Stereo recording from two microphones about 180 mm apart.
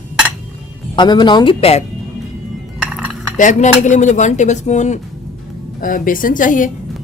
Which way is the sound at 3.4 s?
45° left (ahead or behind).